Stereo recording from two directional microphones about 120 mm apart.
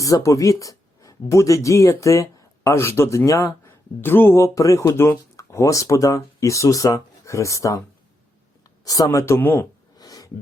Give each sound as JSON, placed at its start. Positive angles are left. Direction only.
{"t": 0.0, "sound": "speech", "side_deg": 30}
{"t": 8.8, "sound": "speech", "side_deg": 30}
{"t": 10.0, "sound": "a sound", "side_deg": 30}